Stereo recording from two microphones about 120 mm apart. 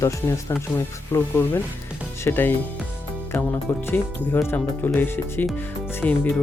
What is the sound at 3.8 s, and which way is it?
Speech, 20° left (ahead or behind).